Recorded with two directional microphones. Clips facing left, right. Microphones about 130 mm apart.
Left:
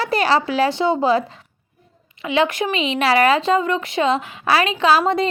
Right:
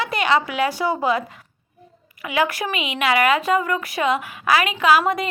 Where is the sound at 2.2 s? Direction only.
25° left (ahead or behind).